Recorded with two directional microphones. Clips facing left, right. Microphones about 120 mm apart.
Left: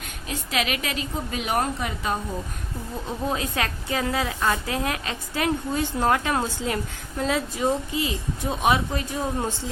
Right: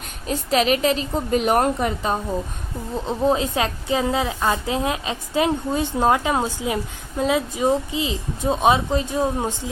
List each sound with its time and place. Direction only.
0.3 s a woman's voice: 35° right (ahead or behind)
2.1 s a woman's voice: 30° right (ahead or behind)